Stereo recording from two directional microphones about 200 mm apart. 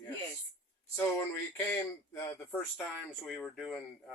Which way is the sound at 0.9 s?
15° left (ahead or behind).